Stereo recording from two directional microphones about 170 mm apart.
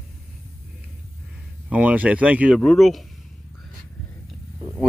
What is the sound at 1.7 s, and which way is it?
A man's voice, 10° right (ahead or behind).